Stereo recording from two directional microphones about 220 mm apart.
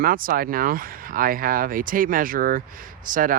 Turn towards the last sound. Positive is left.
turn(degrees=-40)  # may be behind; listen again after turning